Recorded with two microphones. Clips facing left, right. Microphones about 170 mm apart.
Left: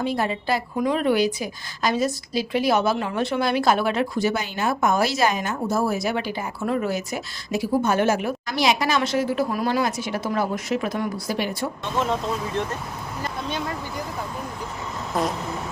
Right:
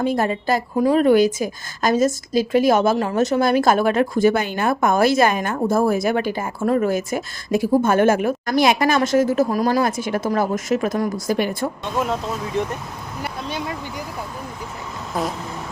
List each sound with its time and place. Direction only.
0.0 s a woman's voice: 45° right (ahead or behind)
11.9 s speech: 5° right (ahead or behind)
13.2 s a sound: 10° right (ahead or behind)
15.1 s speech: centre (ahead or behind)